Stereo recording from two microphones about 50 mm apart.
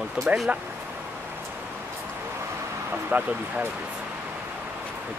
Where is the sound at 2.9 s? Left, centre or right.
Right.